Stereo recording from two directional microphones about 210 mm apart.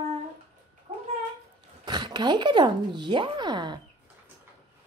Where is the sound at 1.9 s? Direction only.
20° right (ahead or behind).